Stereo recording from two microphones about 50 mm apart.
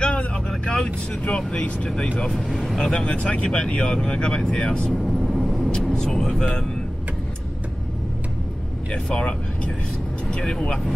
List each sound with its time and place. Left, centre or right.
0.0 s vehicle: centre
1.5 s speech: centre
2.3 s speech: centre
2.8 s speech: centre
5.2 s vehicle: centre
5.7 s speech: centre
8.9 s speech: left
10.3 s speech: centre